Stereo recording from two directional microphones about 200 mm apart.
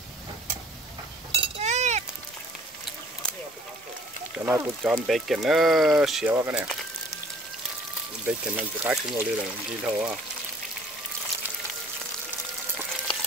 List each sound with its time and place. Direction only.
1.3 s chink: 30° right (ahead or behind)
4.5 s speech: 10° right (ahead or behind)
8.3 s speech: 5° right (ahead or behind)